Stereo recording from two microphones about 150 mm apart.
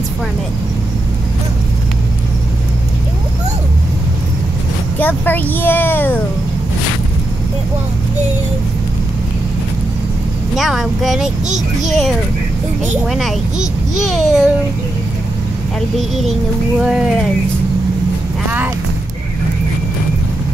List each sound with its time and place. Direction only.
4.9 s speech: 10° left (ahead or behind)
10.5 s a child's voice: centre (ahead or behind)
11.4 s speech: 55° right (ahead or behind)
13.0 s a child's voice: centre (ahead or behind)
16.0 s a child's voice: centre (ahead or behind)